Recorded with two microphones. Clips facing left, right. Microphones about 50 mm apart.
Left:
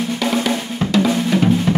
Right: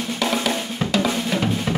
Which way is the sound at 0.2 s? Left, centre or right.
Centre.